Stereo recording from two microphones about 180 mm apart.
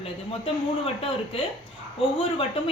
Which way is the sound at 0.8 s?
30° left (ahead or behind).